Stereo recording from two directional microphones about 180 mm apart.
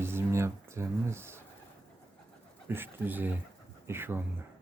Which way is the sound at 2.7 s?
10° right (ahead or behind).